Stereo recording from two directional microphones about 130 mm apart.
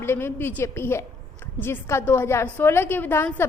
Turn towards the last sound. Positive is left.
turn(degrees=15)  # may be behind; listen again after turning